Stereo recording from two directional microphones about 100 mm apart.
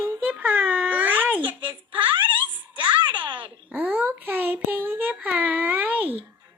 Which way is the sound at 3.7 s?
15° right (ahead or behind).